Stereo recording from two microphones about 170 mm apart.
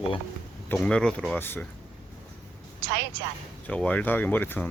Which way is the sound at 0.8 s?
5° left (ahead or behind).